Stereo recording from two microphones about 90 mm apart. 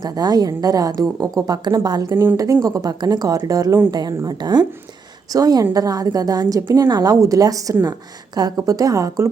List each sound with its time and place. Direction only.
0.0 s a woman's voice: 45° right (ahead or behind)